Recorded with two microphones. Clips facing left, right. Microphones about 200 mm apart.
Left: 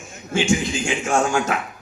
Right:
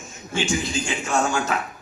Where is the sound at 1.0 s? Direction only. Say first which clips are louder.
Left 3 dB; 50° left (ahead or behind).